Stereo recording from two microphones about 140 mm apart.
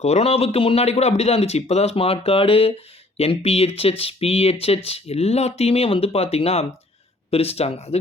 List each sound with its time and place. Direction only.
0.0 s speech: 50° left (ahead or behind)